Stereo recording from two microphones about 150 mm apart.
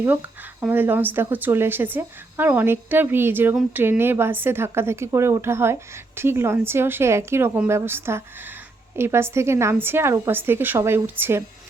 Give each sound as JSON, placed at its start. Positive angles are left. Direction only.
{"t": 0.0, "sound": "a woman's voice", "side_deg": -10}